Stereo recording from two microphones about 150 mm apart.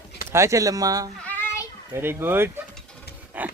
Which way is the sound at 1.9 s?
15° right (ahead or behind).